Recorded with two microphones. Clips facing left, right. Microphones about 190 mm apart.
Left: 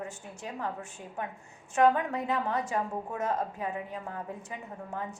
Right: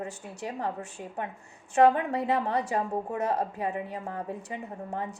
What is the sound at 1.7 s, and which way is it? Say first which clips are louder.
A woman's voice: right 3 dB; 30° right (ahead or behind).